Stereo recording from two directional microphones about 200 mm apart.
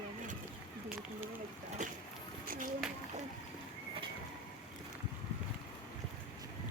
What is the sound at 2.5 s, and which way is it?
Splash, 45° right (ahead or behind).